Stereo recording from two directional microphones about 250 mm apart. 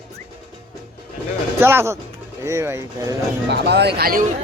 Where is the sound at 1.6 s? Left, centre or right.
Centre.